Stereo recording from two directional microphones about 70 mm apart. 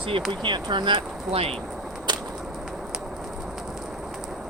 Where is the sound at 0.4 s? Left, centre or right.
Right.